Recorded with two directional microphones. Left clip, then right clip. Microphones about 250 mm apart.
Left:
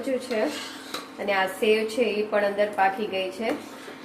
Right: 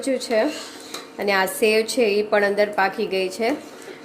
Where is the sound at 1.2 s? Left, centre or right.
Right.